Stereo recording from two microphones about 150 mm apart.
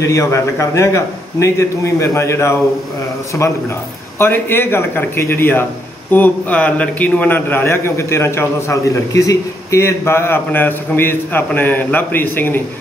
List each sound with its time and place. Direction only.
0.0 s a man's voice: 20° left (ahead or behind)
4.2 s a man's voice: 15° left (ahead or behind)